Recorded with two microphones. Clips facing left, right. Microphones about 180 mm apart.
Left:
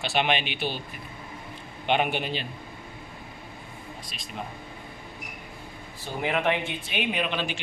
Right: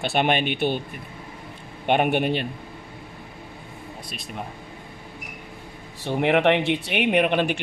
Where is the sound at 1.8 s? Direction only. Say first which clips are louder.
Right 5 dB; 50° right (ahead or behind).